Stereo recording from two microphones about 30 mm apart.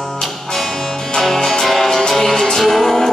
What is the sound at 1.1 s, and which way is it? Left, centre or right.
Music, centre.